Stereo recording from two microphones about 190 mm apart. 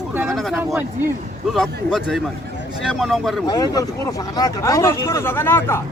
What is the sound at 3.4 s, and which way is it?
Speech, 20° left (ahead or behind).